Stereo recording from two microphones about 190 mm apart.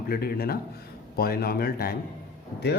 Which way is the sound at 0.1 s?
55° left (ahead or behind).